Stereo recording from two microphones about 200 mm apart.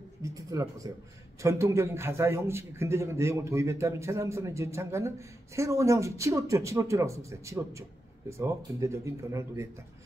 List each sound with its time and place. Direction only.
0.2 s a man's voice: 15° right (ahead or behind)